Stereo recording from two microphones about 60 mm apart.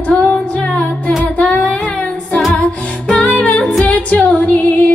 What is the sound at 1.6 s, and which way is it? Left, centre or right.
Child singing, centre.